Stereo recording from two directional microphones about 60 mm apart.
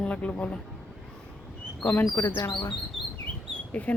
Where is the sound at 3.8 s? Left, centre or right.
Left.